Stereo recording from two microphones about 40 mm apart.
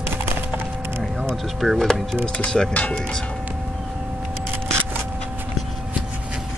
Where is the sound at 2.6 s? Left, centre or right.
Centre.